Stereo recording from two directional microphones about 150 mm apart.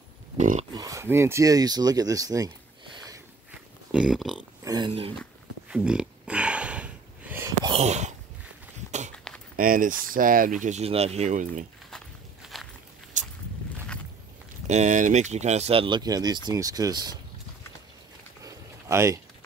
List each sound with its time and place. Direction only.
0.4 s speech: 55° right (ahead or behind)
0.7 s speech: 20° right (ahead or behind)
3.9 s a sound: 5° right (ahead or behind)
4.6 s speech: 25° right (ahead or behind)
5.7 s a sound: 5° right (ahead or behind)
7.7 s a sound: 50° right (ahead or behind)
9.1 s a sound: 5° left (ahead or behind)
9.6 s speech: 65° right (ahead or behind)
10.6 s speech: 50° right (ahead or behind)
11.9 s walk: centre (ahead or behind)
14.7 s speech: 50° right (ahead or behind); by 17.2 s 25° right (ahead or behind)
18.4 s boat: 20° right (ahead or behind)